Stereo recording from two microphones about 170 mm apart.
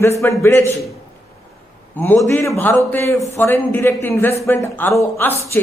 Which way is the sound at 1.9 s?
10° left (ahead or behind).